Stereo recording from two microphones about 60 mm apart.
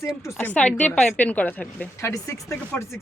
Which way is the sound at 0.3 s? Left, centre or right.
Left.